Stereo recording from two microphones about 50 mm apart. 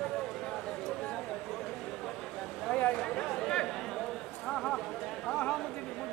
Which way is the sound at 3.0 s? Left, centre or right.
Centre.